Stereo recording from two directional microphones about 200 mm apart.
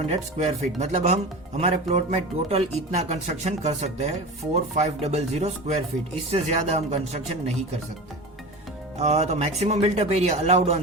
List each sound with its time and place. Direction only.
0.1 s speech: 30° right (ahead or behind)
9.0 s speech: 35° right (ahead or behind)